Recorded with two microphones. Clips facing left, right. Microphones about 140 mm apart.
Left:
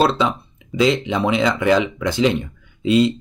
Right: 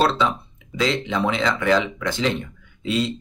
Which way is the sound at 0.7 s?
15° left (ahead or behind).